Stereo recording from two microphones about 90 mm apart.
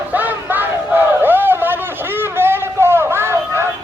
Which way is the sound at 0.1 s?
20° right (ahead or behind).